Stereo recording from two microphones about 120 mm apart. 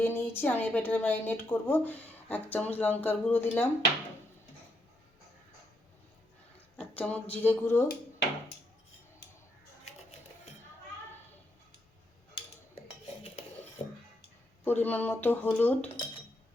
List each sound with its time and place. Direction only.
0.0 s a woman's voice: 20° left (ahead or behind)
6.7 s a woman's voice: 10° left (ahead or behind)
14.6 s a woman's voice: 15° left (ahead or behind)